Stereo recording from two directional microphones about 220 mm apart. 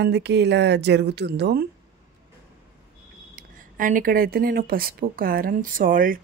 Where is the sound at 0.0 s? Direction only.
50° right (ahead or behind).